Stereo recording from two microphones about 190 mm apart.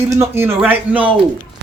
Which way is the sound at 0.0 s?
15° right (ahead or behind).